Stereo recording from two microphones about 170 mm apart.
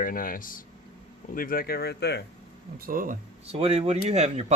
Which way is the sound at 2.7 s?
60° right (ahead or behind).